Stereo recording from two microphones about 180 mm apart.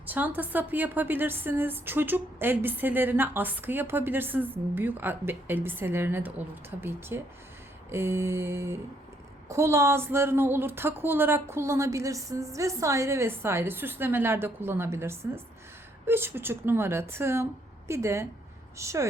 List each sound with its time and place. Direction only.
0.0 s a woman's voice: 10° right (ahead or behind)